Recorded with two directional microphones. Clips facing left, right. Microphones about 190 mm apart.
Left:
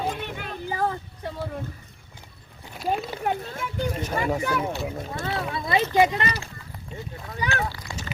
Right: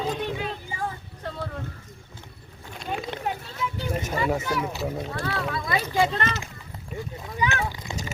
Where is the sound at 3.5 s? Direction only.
50° left (ahead or behind).